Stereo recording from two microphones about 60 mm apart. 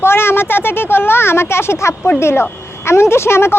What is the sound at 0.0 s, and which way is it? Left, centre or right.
A woman's voice, left.